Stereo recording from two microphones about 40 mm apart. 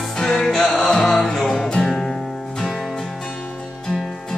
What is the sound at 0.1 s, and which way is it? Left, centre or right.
Music, centre.